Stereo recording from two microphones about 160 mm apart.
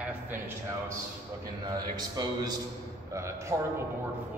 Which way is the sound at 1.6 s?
25° right (ahead or behind).